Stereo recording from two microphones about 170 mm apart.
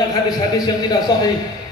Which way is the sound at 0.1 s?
25° left (ahead or behind).